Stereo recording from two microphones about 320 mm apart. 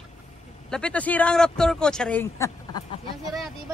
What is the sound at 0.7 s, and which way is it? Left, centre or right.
A man's voice, centre.